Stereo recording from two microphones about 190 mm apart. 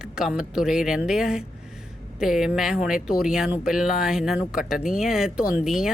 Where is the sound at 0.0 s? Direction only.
5° right (ahead or behind).